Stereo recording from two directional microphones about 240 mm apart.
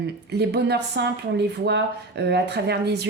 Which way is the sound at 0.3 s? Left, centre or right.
Right.